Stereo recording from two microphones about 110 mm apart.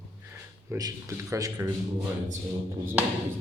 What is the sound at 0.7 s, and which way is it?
Speech, 30° right (ahead or behind).